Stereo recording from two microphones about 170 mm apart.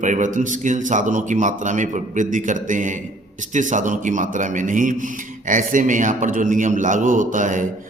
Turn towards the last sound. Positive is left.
turn(degrees=-50)  # may be behind; listen again after turning